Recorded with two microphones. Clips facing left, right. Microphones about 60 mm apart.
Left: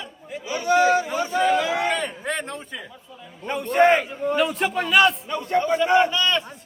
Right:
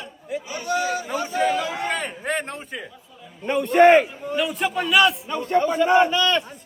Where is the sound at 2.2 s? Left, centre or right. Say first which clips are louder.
Right 2 dB; centre.